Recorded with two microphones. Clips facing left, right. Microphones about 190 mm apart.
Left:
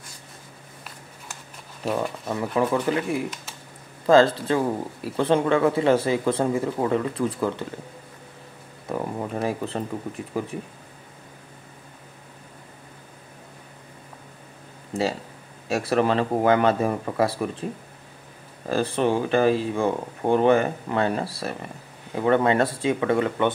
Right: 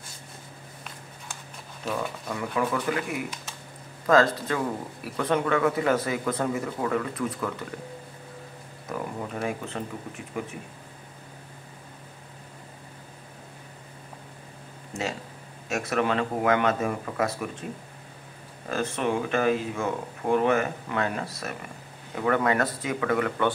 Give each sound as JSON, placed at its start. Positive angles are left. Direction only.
{"t": 1.9, "sound": "speech", "side_deg": 35}
{"t": 8.8, "sound": "speech", "side_deg": 30}
{"t": 14.9, "sound": "speech", "side_deg": 35}
{"t": 18.7, "sound": "speech", "side_deg": 35}